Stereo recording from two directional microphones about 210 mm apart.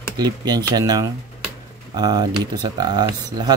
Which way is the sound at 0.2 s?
20° right (ahead or behind).